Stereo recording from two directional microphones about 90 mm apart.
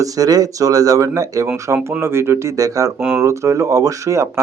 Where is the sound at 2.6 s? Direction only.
40° right (ahead or behind).